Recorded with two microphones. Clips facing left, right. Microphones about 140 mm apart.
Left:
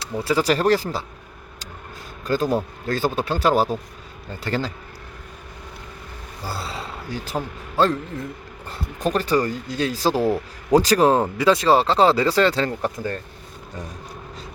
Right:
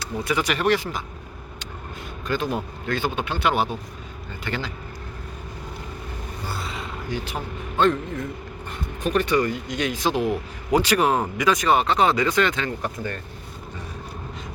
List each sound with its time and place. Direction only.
0.0 s speech: 30° left (ahead or behind)
2.2 s speech: 40° left (ahead or behind)
6.4 s a sound: 35° left (ahead or behind)
8.7 s speech: 35° left (ahead or behind)